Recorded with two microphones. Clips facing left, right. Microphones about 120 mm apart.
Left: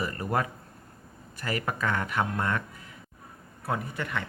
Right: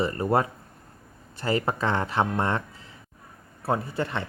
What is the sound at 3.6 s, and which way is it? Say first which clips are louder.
Speech: right 5 dB; 30° right (ahead or behind).